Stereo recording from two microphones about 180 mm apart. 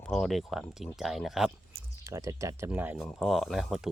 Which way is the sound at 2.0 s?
15° right (ahead or behind).